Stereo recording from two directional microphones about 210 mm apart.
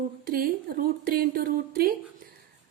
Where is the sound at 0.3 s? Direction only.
45° right (ahead or behind).